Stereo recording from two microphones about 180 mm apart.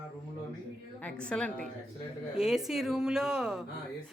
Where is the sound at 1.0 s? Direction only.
5° left (ahead or behind).